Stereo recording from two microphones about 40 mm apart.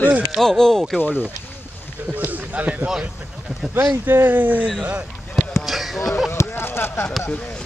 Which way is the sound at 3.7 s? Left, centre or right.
Right.